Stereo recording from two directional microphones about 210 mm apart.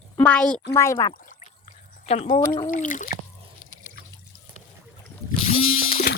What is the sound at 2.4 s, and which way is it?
Speech, 15° left (ahead or behind).